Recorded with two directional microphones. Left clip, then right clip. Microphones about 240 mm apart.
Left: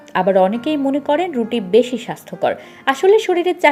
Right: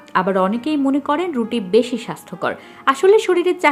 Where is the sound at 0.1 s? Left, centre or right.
Centre.